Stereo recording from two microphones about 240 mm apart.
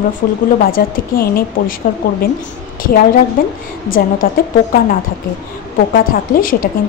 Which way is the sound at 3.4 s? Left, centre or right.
Left.